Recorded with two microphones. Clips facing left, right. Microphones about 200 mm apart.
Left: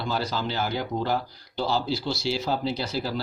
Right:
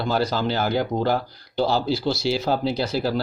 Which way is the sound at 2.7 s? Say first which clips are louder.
Right 6 dB; 65° right (ahead or behind).